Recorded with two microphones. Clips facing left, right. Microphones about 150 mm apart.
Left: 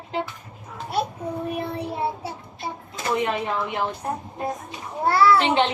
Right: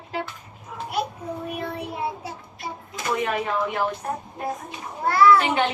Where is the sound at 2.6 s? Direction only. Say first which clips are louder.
Left 2 dB; 30° left (ahead or behind).